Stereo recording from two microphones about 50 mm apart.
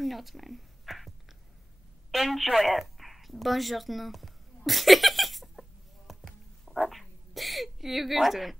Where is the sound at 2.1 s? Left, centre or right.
Centre.